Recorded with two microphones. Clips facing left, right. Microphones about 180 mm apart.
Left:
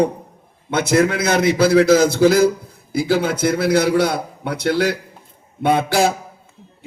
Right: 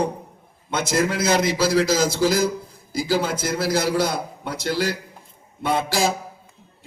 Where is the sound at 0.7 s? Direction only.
60° left (ahead or behind).